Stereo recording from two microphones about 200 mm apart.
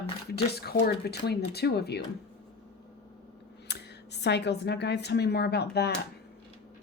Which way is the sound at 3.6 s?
55° left (ahead or behind).